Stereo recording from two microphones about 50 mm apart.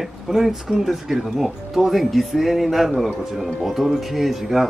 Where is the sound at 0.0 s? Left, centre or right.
Centre.